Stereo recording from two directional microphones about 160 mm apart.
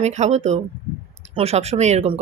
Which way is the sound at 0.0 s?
45° right (ahead or behind).